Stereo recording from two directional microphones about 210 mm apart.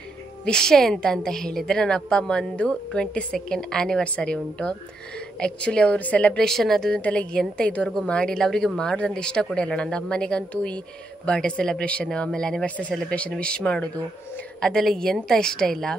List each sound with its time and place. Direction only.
0.5 s a woman's voice: 5° left (ahead or behind)